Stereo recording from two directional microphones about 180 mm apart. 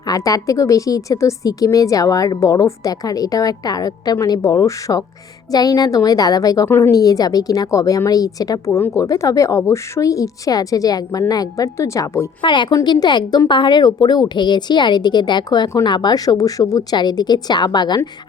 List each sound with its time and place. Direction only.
0.1 s a woman's voice: 20° left (ahead or behind)
12.4 s a woman's voice: 25° left (ahead or behind)